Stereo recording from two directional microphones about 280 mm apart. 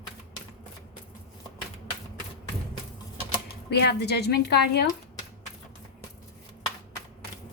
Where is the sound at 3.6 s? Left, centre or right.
Left.